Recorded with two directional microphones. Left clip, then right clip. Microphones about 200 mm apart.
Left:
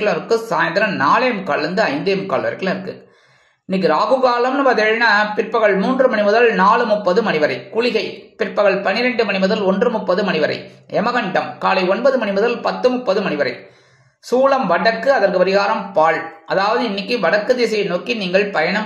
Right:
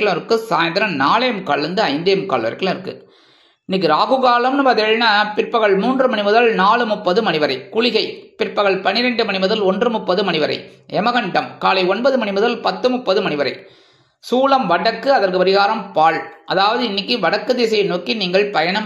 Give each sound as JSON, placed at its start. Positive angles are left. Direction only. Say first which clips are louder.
{"t": 0.0, "sound": "a man's voice", "louder": "even", "side_deg": -30}